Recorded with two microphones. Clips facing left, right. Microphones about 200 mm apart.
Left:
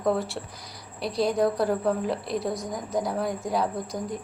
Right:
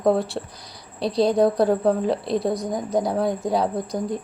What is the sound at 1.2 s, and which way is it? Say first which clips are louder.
Speech: right 5 dB; 30° right (ahead or behind).